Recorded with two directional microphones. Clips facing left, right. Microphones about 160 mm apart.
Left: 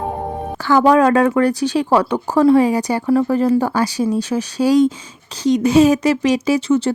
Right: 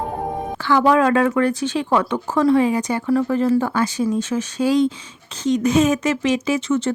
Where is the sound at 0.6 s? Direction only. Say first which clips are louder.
Left 3 dB; 40° left (ahead or behind).